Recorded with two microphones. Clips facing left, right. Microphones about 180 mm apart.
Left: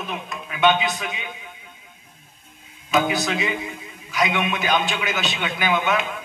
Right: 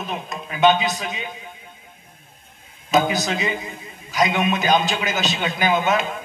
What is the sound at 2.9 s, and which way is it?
A man's voice, 40° right (ahead or behind).